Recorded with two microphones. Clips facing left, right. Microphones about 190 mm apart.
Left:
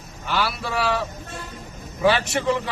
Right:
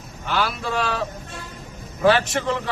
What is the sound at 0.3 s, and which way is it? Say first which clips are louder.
A man's voice: right 1 dB; 5° left (ahead or behind).